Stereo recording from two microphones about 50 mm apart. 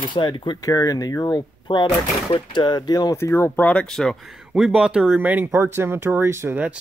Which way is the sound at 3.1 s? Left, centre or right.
Left.